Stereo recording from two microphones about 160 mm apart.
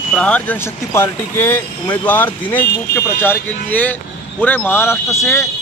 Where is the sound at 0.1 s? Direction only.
5° left (ahead or behind).